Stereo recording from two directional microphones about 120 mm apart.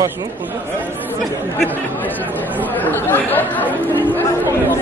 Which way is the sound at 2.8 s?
15° left (ahead or behind).